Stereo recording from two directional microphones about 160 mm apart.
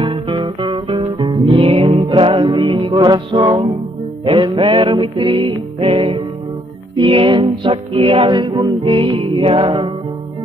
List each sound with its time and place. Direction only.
0.0 s music: 30° right (ahead or behind)